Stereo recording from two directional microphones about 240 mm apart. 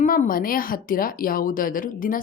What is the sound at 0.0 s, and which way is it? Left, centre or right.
A woman's voice, left.